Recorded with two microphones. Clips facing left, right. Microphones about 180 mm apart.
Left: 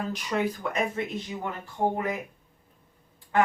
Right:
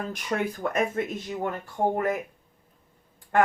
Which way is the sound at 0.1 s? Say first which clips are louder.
Left 1 dB; 50° right (ahead or behind).